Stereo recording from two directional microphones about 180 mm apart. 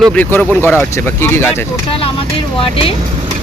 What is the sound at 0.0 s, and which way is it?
Speech, 10° left (ahead or behind).